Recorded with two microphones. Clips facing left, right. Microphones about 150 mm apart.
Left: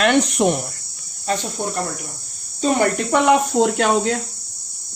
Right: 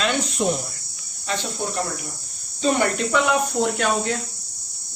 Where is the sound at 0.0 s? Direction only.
70° left (ahead or behind).